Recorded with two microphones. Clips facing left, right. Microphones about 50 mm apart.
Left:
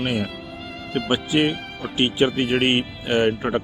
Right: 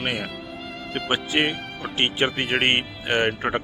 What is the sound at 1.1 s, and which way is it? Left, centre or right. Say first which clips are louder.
Speech: left 2 dB; right.